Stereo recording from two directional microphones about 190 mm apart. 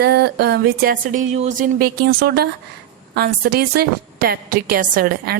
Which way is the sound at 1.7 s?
50° right (ahead or behind).